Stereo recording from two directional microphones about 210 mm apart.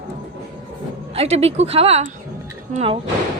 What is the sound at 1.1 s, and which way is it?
Speech, 30° right (ahead or behind).